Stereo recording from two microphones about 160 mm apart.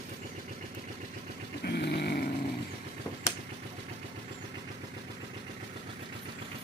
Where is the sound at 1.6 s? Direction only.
90° left.